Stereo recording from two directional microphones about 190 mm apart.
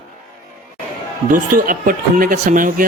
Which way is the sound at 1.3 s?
45° right (ahead or behind).